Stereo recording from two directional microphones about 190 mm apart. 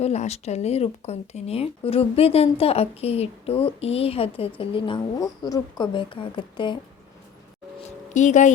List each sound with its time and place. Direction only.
0.0 s speech: 35° left (ahead or behind)
7.9 s speech: 40° left (ahead or behind)